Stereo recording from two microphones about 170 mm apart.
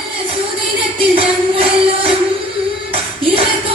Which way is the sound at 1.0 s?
35° right (ahead or behind).